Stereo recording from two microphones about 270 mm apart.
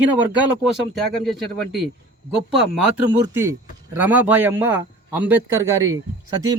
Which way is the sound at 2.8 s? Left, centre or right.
Centre.